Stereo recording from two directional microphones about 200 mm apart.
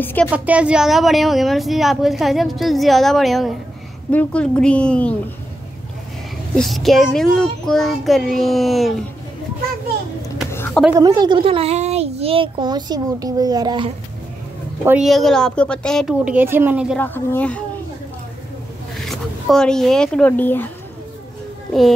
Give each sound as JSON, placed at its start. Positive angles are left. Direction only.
{"t": 0.0, "sound": "speech", "side_deg": 10}
{"t": 0.3, "sound": "speech", "side_deg": -5}
{"t": 6.5, "sound": "speech", "side_deg": 0}
{"t": 11.0, "sound": "a child's voice", "side_deg": -20}
{"t": 14.9, "sound": "speech", "side_deg": 0}
{"t": 16.9, "sound": "speech", "side_deg": 10}
{"t": 18.9, "sound": "speech", "side_deg": 0}